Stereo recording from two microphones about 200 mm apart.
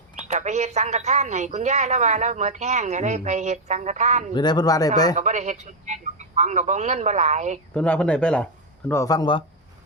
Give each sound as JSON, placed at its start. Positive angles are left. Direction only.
{"t": 0.3, "sound": "speech", "side_deg": -35}
{"t": 4.4, "sound": "speech", "side_deg": 20}
{"t": 5.1, "sound": "speech", "side_deg": -35}
{"t": 7.7, "sound": "speech", "side_deg": 5}
{"t": 8.9, "sound": "speech", "side_deg": 15}